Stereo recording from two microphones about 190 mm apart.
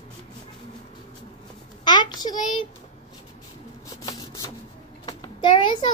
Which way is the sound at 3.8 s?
20° left (ahead or behind).